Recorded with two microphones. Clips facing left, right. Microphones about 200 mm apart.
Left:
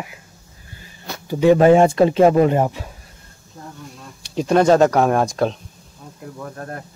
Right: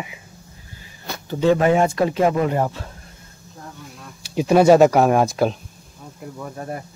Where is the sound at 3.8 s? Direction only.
Centre (ahead or behind).